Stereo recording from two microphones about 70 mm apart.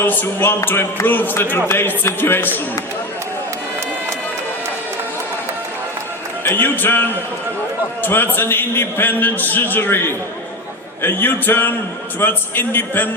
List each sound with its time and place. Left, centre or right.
0.0 s a man's voice: left
6.4 s a man's voice: left